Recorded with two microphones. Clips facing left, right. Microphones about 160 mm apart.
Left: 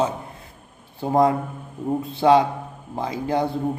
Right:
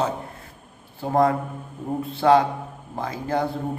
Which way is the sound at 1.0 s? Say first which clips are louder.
Left 1 dB; 20° left (ahead or behind).